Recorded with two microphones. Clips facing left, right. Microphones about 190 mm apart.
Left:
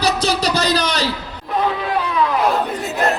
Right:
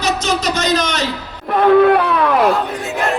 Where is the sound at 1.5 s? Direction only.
60° right (ahead or behind).